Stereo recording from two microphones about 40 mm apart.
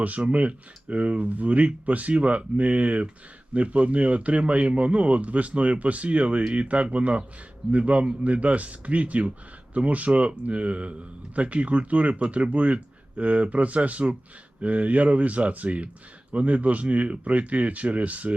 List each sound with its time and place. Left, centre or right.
0.3 s a man's voice: right